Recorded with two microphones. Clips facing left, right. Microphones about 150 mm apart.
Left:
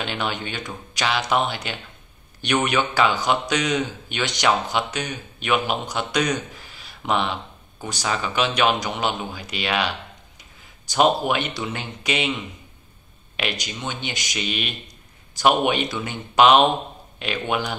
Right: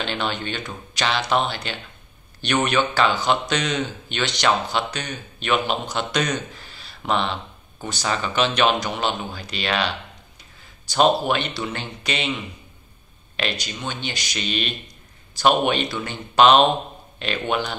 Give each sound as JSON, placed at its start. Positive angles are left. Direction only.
{"t": 0.0, "sound": "speech", "side_deg": 10}
{"t": 13.4, "sound": "speech", "side_deg": 15}